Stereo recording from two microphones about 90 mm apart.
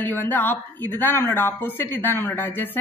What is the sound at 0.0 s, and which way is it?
A woman's voice, 20° left (ahead or behind).